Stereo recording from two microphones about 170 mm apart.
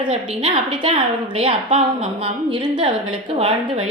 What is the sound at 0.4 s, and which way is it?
A woman's voice, 30° right (ahead or behind).